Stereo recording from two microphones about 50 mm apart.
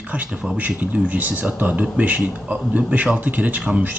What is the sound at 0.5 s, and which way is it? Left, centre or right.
Speech, right.